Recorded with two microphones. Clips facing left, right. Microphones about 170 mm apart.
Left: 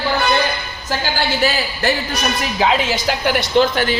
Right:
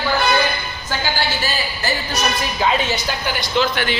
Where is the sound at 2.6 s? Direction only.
85° left.